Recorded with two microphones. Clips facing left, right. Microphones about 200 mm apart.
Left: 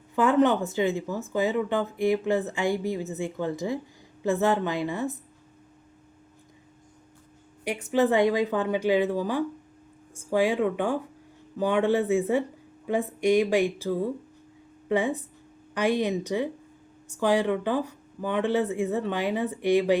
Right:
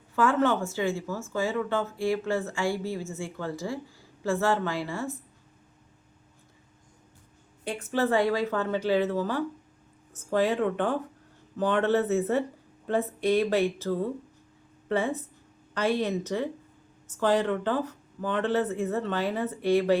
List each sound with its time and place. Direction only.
0.2 s speech: 20° left (ahead or behind)
7.6 s speech: 15° left (ahead or behind)